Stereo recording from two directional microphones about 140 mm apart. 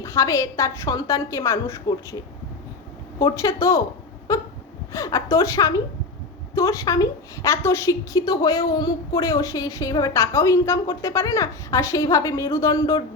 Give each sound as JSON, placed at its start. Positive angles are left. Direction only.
{"t": 0.0, "sound": "a woman's voice", "side_deg": 20}
{"t": 3.2, "sound": "a woman's voice", "side_deg": 25}